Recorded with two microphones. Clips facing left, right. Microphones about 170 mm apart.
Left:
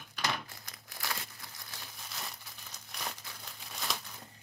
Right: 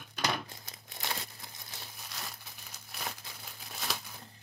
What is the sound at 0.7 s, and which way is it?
Crumpling, 25° right (ahead or behind).